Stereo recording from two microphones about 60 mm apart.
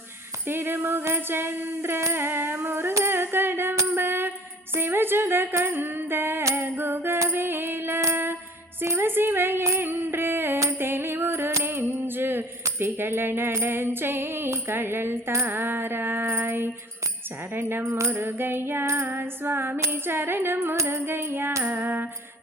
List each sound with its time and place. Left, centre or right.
0.4 s music: right
3.9 s a sound: right
4.7 s music: right
8.1 s a sound: right
8.8 s music: right
17.8 s music: right
18.1 s music: right
20.7 s music: right
21.6 s music: right